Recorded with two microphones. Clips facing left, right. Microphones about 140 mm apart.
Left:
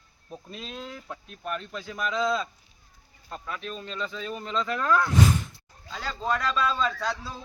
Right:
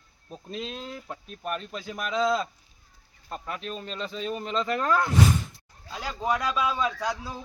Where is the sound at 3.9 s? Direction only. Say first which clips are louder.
Right 1 dB; 25° right (ahead or behind).